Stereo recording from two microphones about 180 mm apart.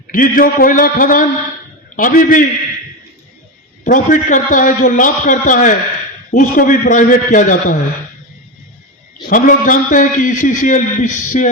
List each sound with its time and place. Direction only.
0.1 s a man's voice: 50° left (ahead or behind)
3.8 s a man's voice: 45° left (ahead or behind)
9.3 s a man's voice: 45° left (ahead or behind)